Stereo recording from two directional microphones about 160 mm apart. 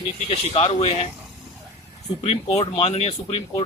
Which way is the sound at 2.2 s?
40° left (ahead or behind).